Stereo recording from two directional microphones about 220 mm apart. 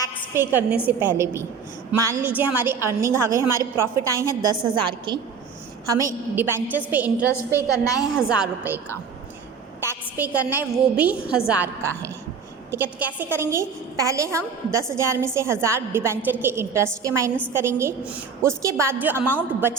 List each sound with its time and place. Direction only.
0.3 s a woman's voice: 10° right (ahead or behind)
7.3 s a woman's voice: 10° left (ahead or behind)
8.0 s a woman's voice: centre (ahead or behind)
9.8 s a woman's voice: 10° right (ahead or behind)